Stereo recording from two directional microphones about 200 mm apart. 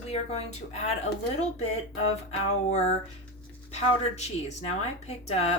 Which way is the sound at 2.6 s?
35° left (ahead or behind).